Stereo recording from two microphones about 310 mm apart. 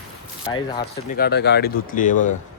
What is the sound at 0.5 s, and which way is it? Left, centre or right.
Speech, centre.